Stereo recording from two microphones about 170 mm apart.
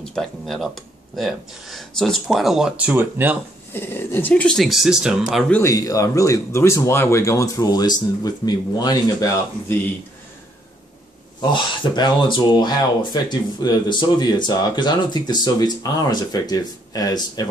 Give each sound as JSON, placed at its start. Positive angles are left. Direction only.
{"t": 0.0, "sound": "speech", "side_deg": 5}
{"t": 3.7, "sound": "speech", "side_deg": 15}
{"t": 5.5, "sound": "speech", "side_deg": 15}
{"t": 11.5, "sound": "speech", "side_deg": 25}